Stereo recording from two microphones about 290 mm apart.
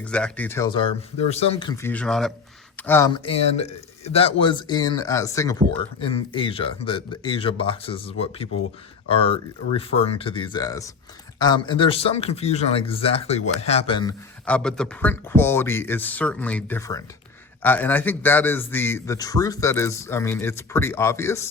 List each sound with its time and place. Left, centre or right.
0.0 s speech: centre